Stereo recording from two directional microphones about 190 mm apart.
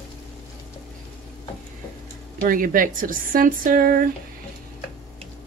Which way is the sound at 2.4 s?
45° right (ahead or behind).